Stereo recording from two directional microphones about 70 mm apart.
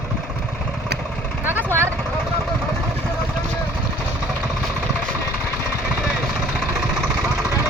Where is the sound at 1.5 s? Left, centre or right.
Right.